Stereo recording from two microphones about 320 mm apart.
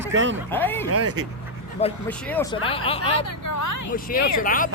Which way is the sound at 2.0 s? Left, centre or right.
Centre.